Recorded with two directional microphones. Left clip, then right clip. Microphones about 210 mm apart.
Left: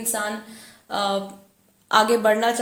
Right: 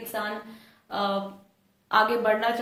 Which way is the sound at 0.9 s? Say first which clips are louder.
Left 4 dB; 55° left (ahead or behind).